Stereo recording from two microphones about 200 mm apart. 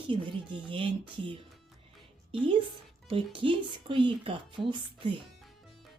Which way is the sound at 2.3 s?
25° right (ahead or behind).